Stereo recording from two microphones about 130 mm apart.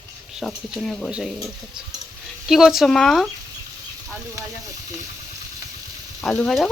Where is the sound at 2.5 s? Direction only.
5° right (ahead or behind).